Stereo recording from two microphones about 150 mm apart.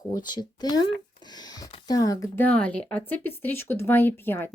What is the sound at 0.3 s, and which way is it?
Speech, 30° left (ahead or behind).